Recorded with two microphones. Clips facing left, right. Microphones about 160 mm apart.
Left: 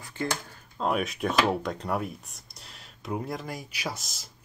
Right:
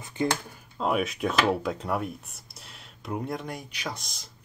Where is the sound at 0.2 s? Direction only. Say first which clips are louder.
Right 4 dB; 20° right (ahead or behind).